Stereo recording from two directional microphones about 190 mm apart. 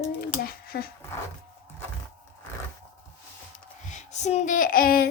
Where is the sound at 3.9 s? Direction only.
40° left (ahead or behind).